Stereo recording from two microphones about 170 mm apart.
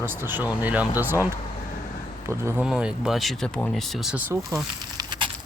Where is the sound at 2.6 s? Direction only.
5° right (ahead or behind).